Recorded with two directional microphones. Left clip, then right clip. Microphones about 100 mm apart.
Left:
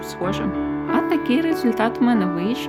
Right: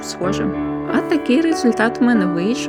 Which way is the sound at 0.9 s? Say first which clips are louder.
Right 3 dB; 30° right (ahead or behind).